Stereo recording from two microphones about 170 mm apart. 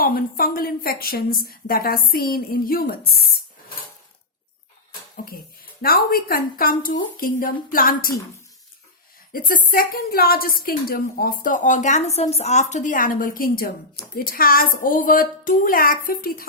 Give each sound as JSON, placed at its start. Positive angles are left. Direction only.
{"t": 0.0, "sound": "a woman's voice", "side_deg": 60}
{"t": 4.9, "sound": "a sound", "side_deg": 55}
{"t": 5.8, "sound": "a woman's voice", "side_deg": 60}
{"t": 9.3, "sound": "a woman's voice", "side_deg": 55}